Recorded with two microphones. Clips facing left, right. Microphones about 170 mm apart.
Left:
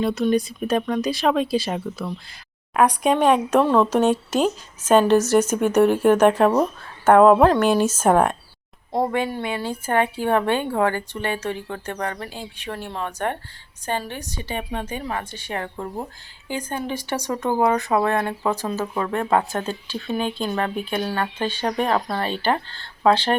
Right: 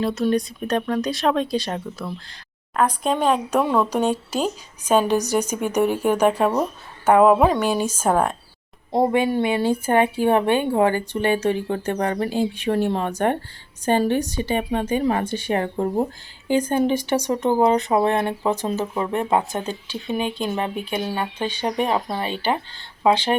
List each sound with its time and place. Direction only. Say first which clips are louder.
0.0 s speech: left 1 dB; centre (ahead or behind)
3.6 s speech: left 3 dB; 10° right (ahead or behind)
8.9 s speech: right 4 dB; 20° right (ahead or behind)
15.0 s speech: right 8 dB; 30° right (ahead or behind)
15.3 s speech: right 7 dB; 15° right (ahead or behind)
15.7 s speech: right 8 dB; 35° right (ahead or behind)
16.5 s speech: right 8 dB; 20° right (ahead or behind)